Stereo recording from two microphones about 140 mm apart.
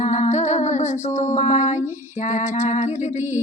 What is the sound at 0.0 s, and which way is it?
Humming, 60° left (ahead or behind).